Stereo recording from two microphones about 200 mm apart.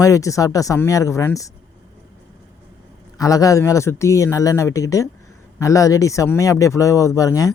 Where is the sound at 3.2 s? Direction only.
15° left (ahead or behind).